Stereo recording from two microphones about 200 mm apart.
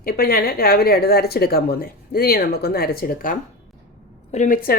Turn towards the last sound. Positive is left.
turn(degrees=45)  # may be behind; listen again after turning